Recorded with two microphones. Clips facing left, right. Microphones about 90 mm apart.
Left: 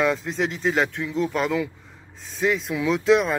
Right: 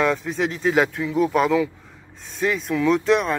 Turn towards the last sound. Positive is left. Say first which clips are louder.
# right 1 dB
turn(degrees=0)  # may be behind; listen again after turning